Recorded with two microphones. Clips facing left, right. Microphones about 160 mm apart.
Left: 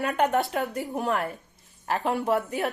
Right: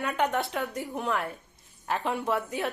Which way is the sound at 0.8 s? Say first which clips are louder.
Left 2 dB; 40° left (ahead or behind).